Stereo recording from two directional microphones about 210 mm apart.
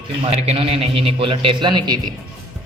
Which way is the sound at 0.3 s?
30° right (ahead or behind).